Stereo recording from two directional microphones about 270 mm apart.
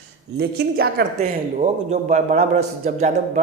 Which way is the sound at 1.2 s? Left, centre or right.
Right.